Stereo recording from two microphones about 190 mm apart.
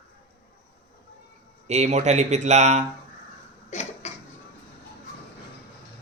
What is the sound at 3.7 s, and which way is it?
Cough, 35° left (ahead or behind).